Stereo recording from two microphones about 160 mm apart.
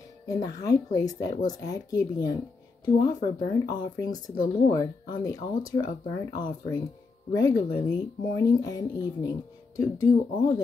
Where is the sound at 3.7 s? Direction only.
25° left (ahead or behind).